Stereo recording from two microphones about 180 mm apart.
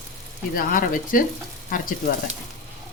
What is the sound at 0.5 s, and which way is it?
Speech, 50° left (ahead or behind).